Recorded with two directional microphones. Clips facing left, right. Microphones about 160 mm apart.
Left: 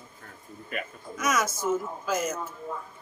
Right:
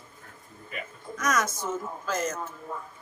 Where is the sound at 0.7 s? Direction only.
60° left (ahead or behind).